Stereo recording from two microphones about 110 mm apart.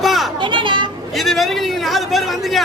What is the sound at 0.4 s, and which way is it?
Children playing, 50° right (ahead or behind).